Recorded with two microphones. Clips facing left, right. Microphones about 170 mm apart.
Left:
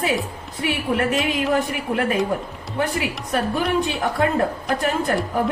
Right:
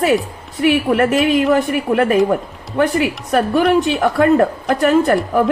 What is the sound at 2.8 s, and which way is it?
A woman's voice, 70° right (ahead or behind).